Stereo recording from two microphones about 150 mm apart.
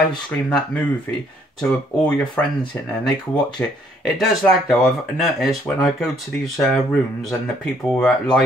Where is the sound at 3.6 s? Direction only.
10° left (ahead or behind).